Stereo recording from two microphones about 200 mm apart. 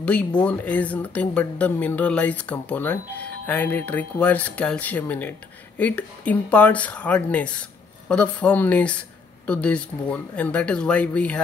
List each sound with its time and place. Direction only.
0.4 s speech: 5° left (ahead or behind)